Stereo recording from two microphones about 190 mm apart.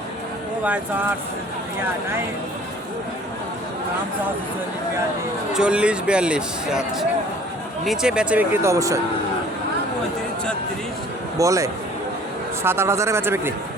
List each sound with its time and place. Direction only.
0.6 s speech: 5° right (ahead or behind)
5.5 s speech: 5° right (ahead or behind)
11.3 s speech: 15° right (ahead or behind)